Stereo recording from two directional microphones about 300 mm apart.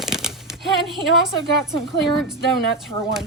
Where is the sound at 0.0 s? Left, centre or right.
Centre.